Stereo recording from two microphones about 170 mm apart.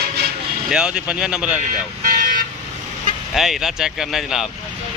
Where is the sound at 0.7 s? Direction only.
5° right (ahead or behind).